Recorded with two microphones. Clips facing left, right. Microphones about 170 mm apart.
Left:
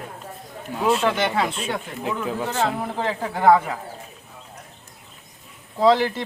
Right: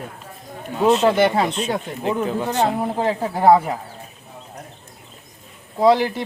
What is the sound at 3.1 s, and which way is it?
Speech, 30° right (ahead or behind).